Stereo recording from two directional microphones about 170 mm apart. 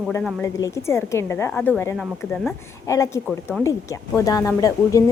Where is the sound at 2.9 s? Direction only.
15° left (ahead or behind).